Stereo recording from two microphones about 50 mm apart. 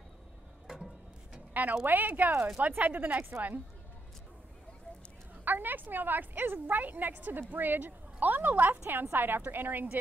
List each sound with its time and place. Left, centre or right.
1.5 s a sound: right
1.9 s a woman's voice: right
5.4 s a woman's voice: right